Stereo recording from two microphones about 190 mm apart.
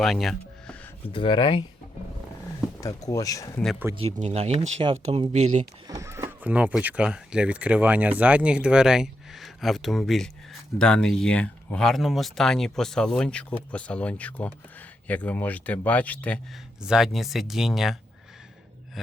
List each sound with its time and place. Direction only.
0.0 s music: centre (ahead or behind)
1.1 s speech: 25° left (ahead or behind)
2.8 s speech: 15° left (ahead or behind)
3.9 s speech: 35° right (ahead or behind)
5.9 s speech: 15° right (ahead or behind); by 16.4 s 5° left (ahead or behind)
16.8 s speech: 5° right (ahead or behind)